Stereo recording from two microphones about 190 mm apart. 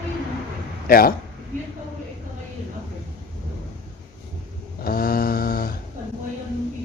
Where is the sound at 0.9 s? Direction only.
50° left (ahead or behind).